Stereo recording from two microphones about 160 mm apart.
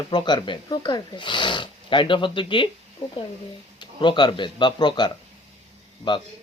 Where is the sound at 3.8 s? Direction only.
30° left (ahead or behind).